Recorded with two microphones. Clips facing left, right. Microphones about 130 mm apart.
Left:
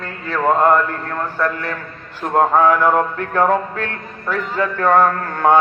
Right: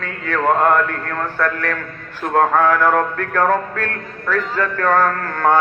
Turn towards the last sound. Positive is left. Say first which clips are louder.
# left 2 dB
turn(degrees=20)  # may be behind; listen again after turning